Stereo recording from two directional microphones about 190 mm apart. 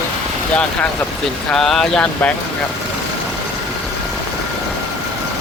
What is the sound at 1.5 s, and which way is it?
Speech, 5° left (ahead or behind).